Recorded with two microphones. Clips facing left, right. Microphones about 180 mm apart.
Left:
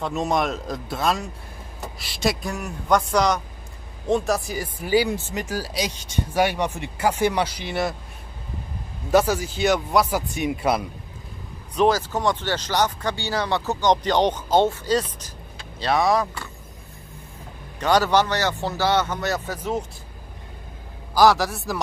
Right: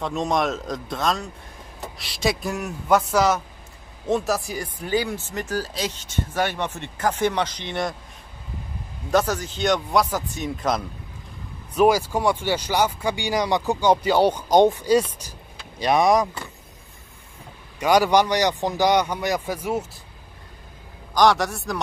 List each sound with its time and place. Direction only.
0.0 s a man's voice: 5° left (ahead or behind)
9.1 s speech: 10° left (ahead or behind)
11.7 s speech: 10° right (ahead or behind)
17.7 s speech: 10° right (ahead or behind)
21.1 s a man's voice: 5° left (ahead or behind)